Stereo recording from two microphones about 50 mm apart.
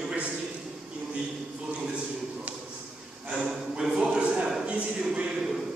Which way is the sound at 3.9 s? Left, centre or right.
Right.